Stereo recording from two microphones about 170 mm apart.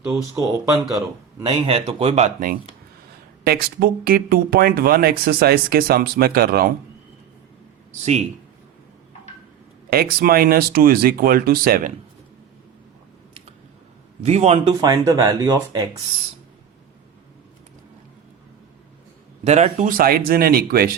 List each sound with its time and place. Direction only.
0.2 s speech: 20° right (ahead or behind); by 2.5 s 40° right (ahead or behind)
3.4 s speech: 65° right (ahead or behind)
9.9 s speech: 65° right (ahead or behind)
14.3 s speech: 40° right (ahead or behind)
14.8 s speech: 20° right (ahead or behind)
19.5 s speech: 40° right (ahead or behind); by 20.9 s 60° right (ahead or behind)